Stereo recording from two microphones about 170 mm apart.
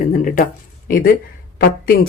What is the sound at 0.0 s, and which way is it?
Speech, 55° left (ahead or behind).